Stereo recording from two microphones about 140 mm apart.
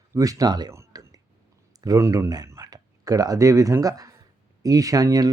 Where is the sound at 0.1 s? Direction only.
25° right (ahead or behind).